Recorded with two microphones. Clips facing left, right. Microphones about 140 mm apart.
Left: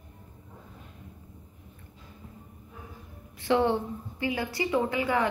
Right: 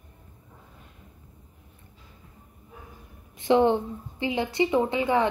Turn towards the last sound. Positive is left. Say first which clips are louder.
# right 3 dB
turn(degrees=-25)  # may be behind; listen again after turning